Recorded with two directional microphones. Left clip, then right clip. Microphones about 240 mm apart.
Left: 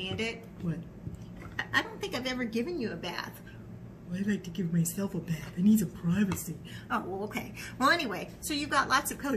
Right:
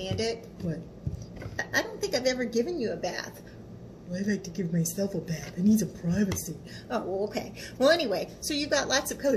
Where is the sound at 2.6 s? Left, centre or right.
Centre.